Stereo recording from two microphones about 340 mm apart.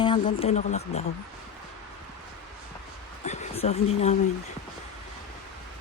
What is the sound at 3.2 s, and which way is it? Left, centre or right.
Speech, centre.